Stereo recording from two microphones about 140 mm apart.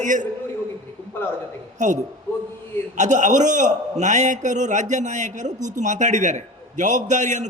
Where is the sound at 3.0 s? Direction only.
60° right (ahead or behind).